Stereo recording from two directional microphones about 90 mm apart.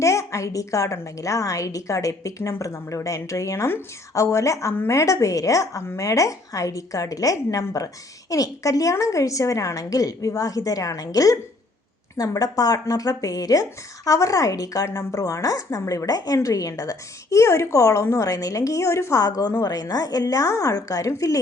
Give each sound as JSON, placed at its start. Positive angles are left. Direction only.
{"t": 0.0, "sound": "a woman's voice", "side_deg": 35}